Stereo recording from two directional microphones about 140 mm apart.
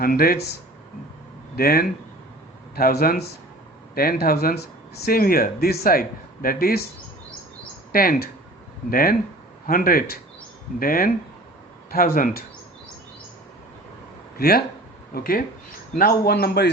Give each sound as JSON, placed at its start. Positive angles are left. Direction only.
{"t": 0.0, "sound": "speech", "side_deg": 90}
{"t": 1.5, "sound": "speech", "side_deg": 90}
{"t": 7.9, "sound": "speech", "side_deg": 90}
{"t": 14.3, "sound": "speech", "side_deg": 90}